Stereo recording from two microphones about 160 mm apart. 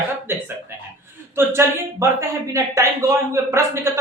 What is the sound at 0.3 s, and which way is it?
Speech, 15° right (ahead or behind).